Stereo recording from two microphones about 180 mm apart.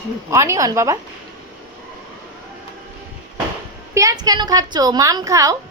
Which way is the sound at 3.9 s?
20° right (ahead or behind).